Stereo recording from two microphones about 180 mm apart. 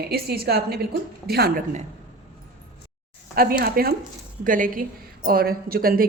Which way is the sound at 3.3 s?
55° right (ahead or behind).